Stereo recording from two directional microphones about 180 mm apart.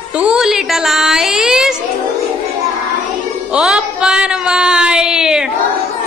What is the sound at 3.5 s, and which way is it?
Music, 5° right (ahead or behind).